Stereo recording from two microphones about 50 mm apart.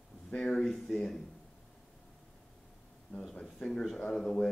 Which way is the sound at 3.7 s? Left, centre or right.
Centre.